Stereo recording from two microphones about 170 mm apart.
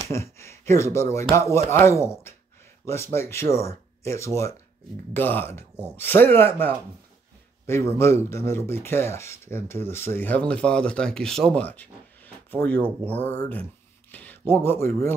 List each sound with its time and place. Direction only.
0.1 s speech: 15° left (ahead or behind)